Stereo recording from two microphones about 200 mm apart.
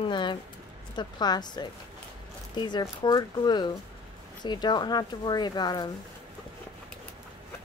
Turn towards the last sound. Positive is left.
turn(degrees=20)  # may be behind; listen again after turning